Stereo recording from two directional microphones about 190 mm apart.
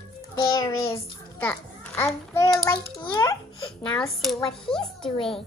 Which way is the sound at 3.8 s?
5° left (ahead or behind).